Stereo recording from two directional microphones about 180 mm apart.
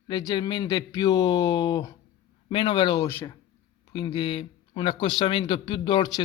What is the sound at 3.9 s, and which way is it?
Speech, 25° left (ahead or behind).